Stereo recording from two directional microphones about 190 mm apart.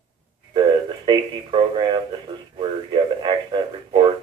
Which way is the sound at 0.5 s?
25° right (ahead or behind).